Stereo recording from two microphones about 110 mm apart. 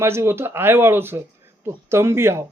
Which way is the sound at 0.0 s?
25° right (ahead or behind).